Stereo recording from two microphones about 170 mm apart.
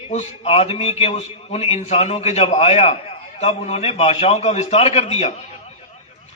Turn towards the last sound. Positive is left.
turn(degrees=40)  # may be behind; listen again after turning